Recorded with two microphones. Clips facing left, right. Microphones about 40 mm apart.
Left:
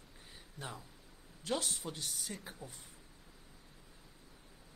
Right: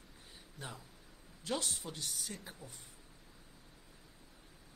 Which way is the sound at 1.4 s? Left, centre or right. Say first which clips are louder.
Left 1 dB; centre.